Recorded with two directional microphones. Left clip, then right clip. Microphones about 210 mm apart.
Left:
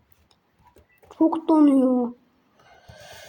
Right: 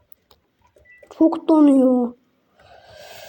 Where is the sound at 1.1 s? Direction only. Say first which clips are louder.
Right 4 dB; 15° right (ahead or behind).